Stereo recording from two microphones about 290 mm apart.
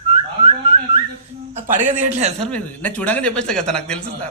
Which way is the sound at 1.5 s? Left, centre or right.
Right.